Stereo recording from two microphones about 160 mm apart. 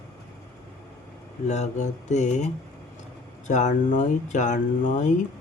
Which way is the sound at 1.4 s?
45° left (ahead or behind).